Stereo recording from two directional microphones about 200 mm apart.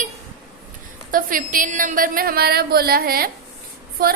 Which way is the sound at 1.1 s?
45° right (ahead or behind).